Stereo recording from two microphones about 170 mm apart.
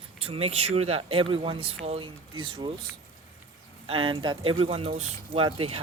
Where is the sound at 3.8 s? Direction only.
30° right (ahead or behind).